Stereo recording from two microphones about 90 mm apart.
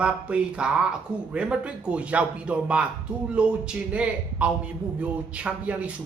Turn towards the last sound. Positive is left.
turn(degrees=-15)  # may be behind; listen again after turning